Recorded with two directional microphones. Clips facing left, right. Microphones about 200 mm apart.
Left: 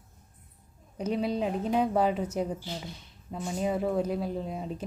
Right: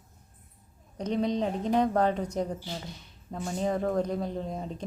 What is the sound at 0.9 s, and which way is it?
Speech, 5° left (ahead or behind).